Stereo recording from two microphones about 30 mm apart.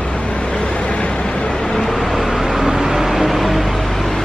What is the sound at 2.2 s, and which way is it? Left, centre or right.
Vehicle, centre.